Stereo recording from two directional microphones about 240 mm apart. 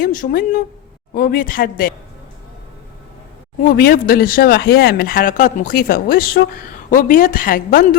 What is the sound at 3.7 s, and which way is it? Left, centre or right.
A woman's voice, left.